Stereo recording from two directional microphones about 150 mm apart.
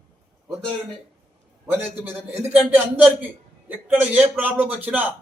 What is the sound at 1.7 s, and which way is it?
A man's voice, 15° right (ahead or behind).